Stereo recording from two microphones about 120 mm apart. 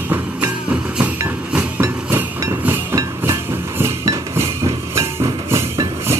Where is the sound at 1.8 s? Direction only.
20° right (ahead or behind).